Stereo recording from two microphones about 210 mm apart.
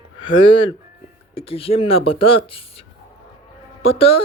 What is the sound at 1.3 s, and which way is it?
Speech, 25° left (ahead or behind).